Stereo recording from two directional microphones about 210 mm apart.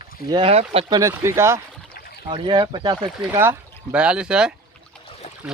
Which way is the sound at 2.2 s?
25° right (ahead or behind).